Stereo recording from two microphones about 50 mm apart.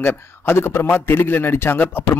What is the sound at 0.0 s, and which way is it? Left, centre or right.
A man's voice, left.